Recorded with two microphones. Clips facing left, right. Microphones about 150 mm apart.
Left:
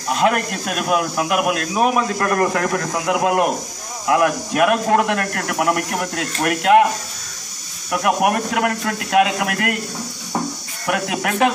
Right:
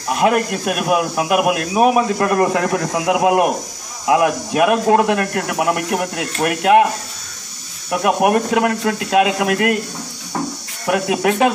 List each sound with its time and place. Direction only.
0.1 s a man's voice: 15° right (ahead or behind)
7.9 s speech: 25° right (ahead or behind)
10.9 s speech: 20° right (ahead or behind)